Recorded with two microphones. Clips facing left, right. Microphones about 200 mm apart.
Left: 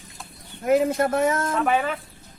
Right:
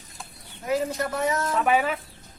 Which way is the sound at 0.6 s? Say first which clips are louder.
Left 6 dB; 50° left (ahead or behind).